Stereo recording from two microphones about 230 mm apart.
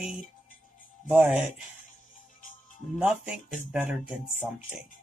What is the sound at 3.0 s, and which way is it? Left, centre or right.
Speech, centre.